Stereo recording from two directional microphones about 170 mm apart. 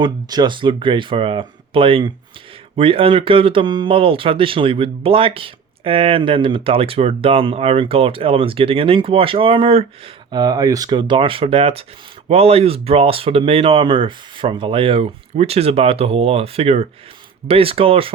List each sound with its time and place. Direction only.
0.0 s speech: 25° right (ahead or behind)